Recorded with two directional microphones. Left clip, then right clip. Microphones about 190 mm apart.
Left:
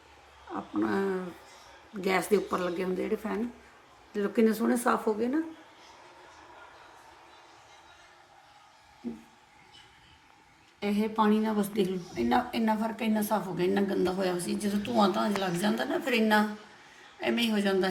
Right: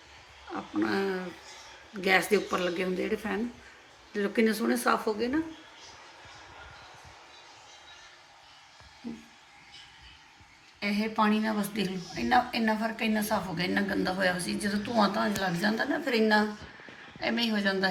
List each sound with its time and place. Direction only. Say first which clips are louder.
0.5 s a sound: even; 5° left (ahead or behind)
0.9 s a woman's voice: left 1 dB; 15° left (ahead or behind)
10.8 s a woman's voice: even; 15° left (ahead or behind)